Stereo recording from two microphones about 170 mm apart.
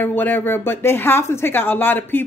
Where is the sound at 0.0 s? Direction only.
10° left (ahead or behind).